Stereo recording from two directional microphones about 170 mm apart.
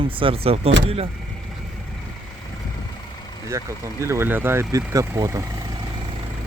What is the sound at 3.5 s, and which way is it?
Speech, 20° right (ahead or behind).